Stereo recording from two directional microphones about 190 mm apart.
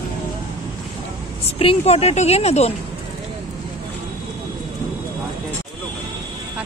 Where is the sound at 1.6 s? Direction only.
30° left (ahead or behind).